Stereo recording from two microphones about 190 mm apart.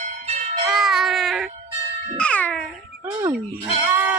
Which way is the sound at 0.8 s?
Centre (ahead or behind).